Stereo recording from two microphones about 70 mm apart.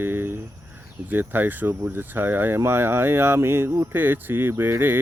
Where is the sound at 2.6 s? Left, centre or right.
Right.